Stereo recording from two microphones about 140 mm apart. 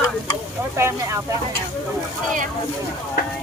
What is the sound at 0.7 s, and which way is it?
Speech, 20° right (ahead or behind).